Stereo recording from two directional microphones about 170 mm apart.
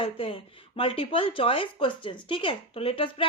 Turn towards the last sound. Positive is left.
turn(degrees=30)  # may be behind; listen again after turning